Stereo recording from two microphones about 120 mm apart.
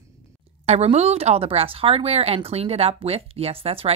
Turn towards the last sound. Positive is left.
turn(degrees=-55)  # may be behind; listen again after turning